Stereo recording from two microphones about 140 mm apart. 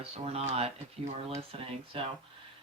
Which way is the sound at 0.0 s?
45° right (ahead or behind).